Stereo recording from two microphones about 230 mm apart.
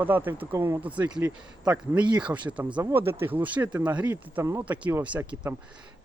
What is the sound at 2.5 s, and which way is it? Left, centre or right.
Speech, centre.